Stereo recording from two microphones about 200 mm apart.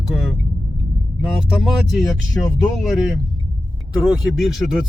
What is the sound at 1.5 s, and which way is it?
Speech, centre (ahead or behind).